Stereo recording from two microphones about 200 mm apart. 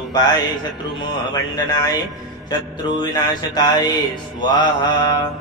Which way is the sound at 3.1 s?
20° left (ahead or behind).